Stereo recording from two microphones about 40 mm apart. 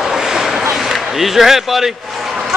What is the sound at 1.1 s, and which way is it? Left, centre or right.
Speech, centre.